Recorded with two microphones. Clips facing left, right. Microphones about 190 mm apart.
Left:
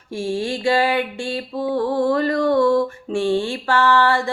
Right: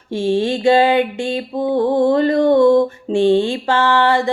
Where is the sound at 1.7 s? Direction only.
20° right (ahead or behind).